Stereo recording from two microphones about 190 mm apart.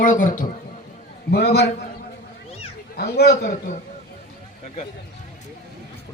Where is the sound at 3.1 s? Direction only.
55° left (ahead or behind).